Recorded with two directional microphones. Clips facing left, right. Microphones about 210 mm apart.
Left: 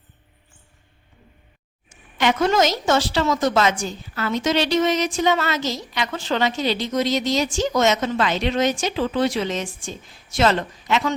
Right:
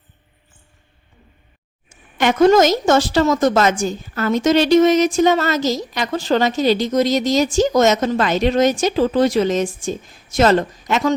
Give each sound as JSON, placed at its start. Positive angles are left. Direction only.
{"t": 2.1, "sound": "a woman's voice", "side_deg": -45}